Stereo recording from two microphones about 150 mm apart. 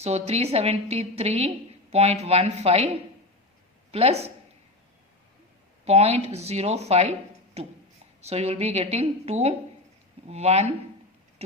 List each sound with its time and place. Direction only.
0.0 s a woman's voice: 45° right (ahead or behind)
3.9 s a woman's voice: 45° right (ahead or behind)
5.8 s a woman's voice: 45° right (ahead or behind)
8.2 s a woman's voice: 45° right (ahead or behind)